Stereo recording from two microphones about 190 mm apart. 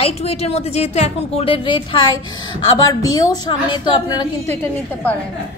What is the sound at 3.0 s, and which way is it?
Speech, 20° left (ahead or behind).